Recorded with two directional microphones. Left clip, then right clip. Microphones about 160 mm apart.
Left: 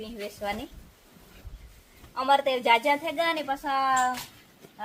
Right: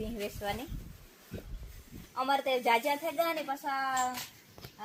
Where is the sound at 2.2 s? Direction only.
50° right (ahead or behind).